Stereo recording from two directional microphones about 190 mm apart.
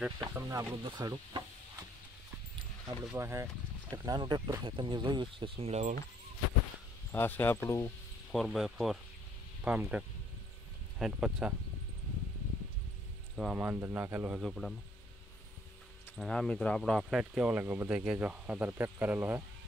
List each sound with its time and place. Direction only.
0.3 s speech: 15° right (ahead or behind)
3.0 s speech: 10° right (ahead or behind); by 5.9 s 35° right (ahead or behind)
7.1 s speech: 10° left (ahead or behind)
8.3 s speech: centre (ahead or behind)
13.4 s speech: 5° right (ahead or behind)
16.2 s speech: 5° left (ahead or behind)